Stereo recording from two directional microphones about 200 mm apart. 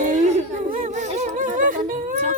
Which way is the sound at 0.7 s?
35° right (ahead or behind).